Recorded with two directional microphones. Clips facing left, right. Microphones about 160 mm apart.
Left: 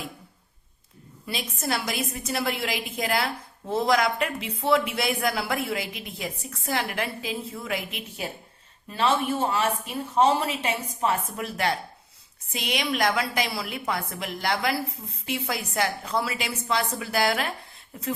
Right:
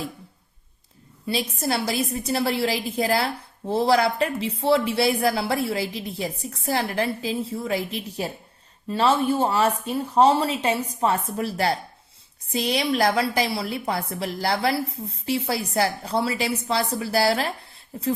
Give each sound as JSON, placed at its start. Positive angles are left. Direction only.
{"t": 1.3, "sound": "a woman's voice", "side_deg": -35}